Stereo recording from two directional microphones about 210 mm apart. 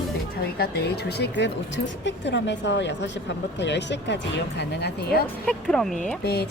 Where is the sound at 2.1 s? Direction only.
55° left (ahead or behind).